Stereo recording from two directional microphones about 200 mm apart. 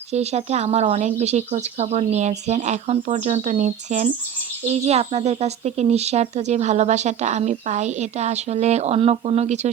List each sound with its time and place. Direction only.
0.1 s speech: 35° right (ahead or behind)